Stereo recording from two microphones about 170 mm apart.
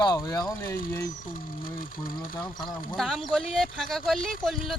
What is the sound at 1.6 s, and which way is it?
Speech, 55° left (ahead or behind).